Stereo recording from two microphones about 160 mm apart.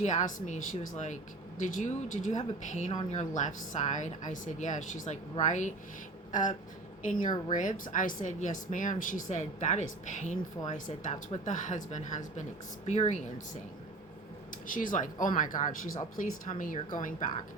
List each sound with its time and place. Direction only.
0.0 s speech: 50° left (ahead or behind)
14.7 s speech: 55° left (ahead or behind)